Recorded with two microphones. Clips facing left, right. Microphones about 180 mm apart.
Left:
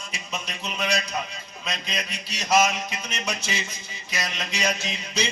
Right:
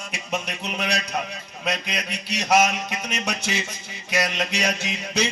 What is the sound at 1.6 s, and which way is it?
Mantra, 70° right (ahead or behind).